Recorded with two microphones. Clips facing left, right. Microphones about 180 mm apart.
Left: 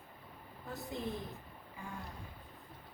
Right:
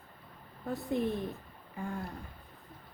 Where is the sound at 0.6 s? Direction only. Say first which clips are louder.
Right 10 dB; 60° right (ahead or behind).